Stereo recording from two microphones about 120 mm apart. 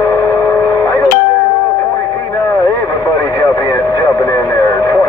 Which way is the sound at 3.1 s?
25° left (ahead or behind).